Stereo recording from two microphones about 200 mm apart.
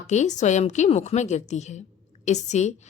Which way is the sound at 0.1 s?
35° left (ahead or behind).